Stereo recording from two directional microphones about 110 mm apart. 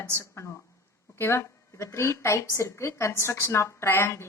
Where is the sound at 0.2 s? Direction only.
25° left (ahead or behind).